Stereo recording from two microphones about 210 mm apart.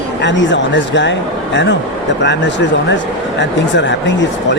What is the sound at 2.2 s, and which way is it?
Speech, 55° left (ahead or behind).